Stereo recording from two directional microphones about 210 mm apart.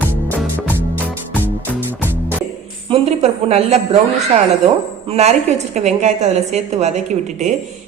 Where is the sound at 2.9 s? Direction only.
30° right (ahead or behind).